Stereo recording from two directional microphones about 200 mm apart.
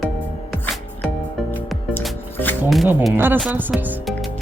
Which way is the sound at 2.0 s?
5° left (ahead or behind).